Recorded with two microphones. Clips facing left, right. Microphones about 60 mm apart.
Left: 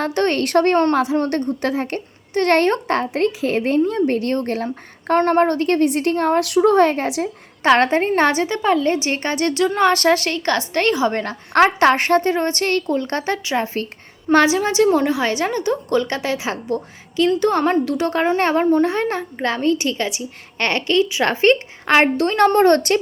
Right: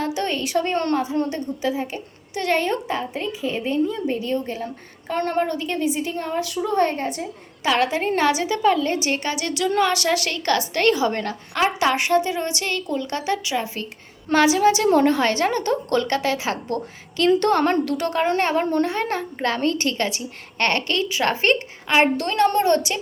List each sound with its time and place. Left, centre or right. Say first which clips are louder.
0.0 s a woman's voice: left 5 dB; left
5.2 s speech: left 5 dB; left
7.6 s a woman's voice: left 6 dB; left
11.5 s a woman's voice: left 7 dB; left
14.8 s a woman's voice: even; centre; by 18.1 s left
18.3 s a woman's voice: left 3 dB; left
18.6 s a woman's voice: left 5 dB; centre
18.9 s a woman's voice: left 3 dB; left
22.6 s a woman's voice: left 6 dB; left